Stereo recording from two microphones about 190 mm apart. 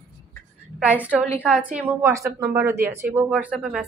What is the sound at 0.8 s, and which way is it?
Speech, 5° right (ahead or behind).